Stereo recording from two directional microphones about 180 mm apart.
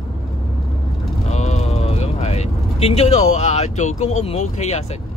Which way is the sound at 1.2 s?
40° left (ahead or behind).